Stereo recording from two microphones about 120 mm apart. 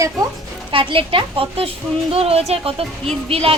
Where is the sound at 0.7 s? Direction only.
45° right (ahead or behind).